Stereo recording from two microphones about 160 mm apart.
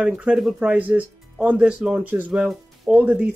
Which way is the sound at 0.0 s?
10° right (ahead or behind).